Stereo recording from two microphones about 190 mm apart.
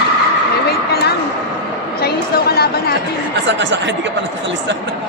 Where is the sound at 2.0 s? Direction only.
55° left (ahead or behind).